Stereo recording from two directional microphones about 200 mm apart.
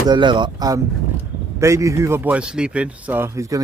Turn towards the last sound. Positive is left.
turn(degrees=-15)  # may be behind; listen again after turning